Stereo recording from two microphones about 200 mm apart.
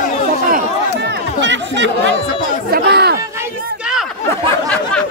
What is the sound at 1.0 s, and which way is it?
Chatter, 60° right (ahead or behind).